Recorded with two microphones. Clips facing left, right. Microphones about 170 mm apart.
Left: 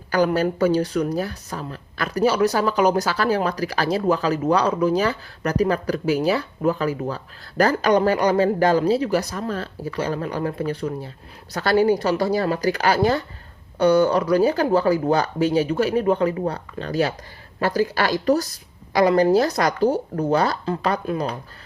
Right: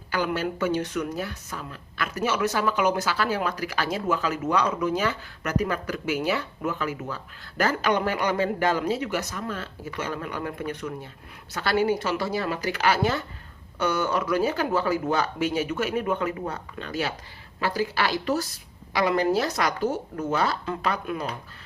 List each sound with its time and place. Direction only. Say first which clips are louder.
0.1 s a woman's voice: left 7 dB; 40° left (ahead or behind)